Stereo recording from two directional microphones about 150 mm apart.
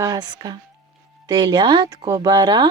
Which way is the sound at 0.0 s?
25° right (ahead or behind).